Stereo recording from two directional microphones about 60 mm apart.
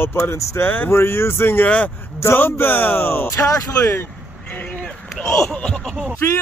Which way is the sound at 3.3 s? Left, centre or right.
Left.